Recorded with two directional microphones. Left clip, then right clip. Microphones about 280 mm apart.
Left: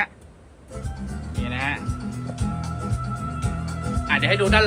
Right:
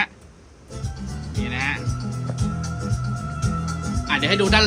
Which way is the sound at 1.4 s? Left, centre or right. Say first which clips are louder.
Right 1 dB; centre.